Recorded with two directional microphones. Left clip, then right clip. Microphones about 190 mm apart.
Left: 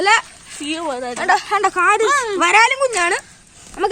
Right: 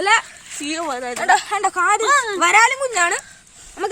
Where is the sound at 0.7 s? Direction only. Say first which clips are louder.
Left 1 dB; 45° right (ahead or behind).